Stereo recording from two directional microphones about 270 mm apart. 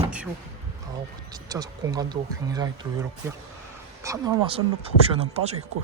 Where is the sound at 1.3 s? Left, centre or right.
Centre.